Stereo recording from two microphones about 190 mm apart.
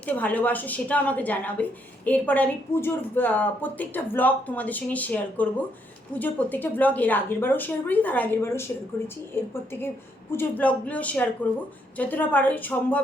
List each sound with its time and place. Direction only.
0.0 s a woman's voice: 10° left (ahead or behind)